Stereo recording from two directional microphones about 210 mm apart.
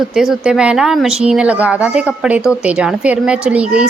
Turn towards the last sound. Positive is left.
turn(degrees=-5)  # may be behind; listen again after turning